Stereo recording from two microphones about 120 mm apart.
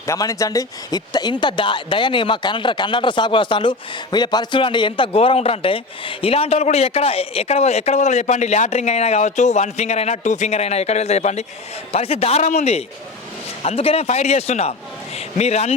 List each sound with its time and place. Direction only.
0.0 s speech: 25° left (ahead or behind); by 11.4 s 70° left (ahead or behind)
11.9 s a man's voice: 55° left (ahead or behind)